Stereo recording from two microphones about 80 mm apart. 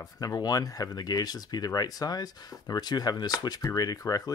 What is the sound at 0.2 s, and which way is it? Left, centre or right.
Speech, left.